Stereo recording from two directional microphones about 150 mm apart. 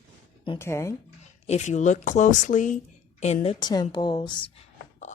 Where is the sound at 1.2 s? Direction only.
50° left (ahead or behind).